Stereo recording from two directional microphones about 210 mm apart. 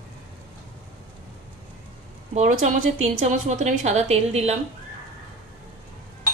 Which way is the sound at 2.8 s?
75° right (ahead or behind).